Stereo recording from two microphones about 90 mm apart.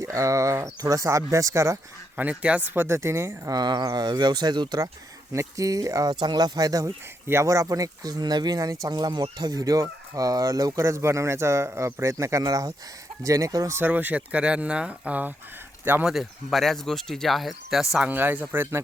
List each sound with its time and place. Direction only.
0.0 s speech: 35° right (ahead or behind)
2.1 s speech: 15° right (ahead or behind)
2.6 s speech: 25° right (ahead or behind)
3.5 s speech: 50° right (ahead or behind)
5.3 s speech: 35° right (ahead or behind)
7.3 s speech: 35° right (ahead or behind)
13.7 s speech: 20° right (ahead or behind)
16.0 s speech: centre (ahead or behind)
18.0 s speech: 20° right (ahead or behind)